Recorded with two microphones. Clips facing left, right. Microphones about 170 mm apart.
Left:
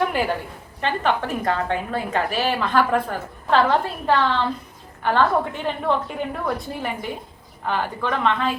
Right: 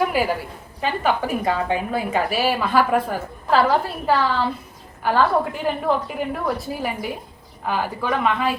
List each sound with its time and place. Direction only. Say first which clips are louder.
0.1 s a woman's voice: right 2 dB; 5° right (ahead or behind)